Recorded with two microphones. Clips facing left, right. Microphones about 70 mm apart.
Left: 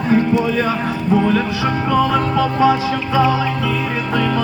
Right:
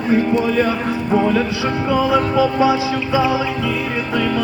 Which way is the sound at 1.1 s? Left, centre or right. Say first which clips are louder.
Even; centre.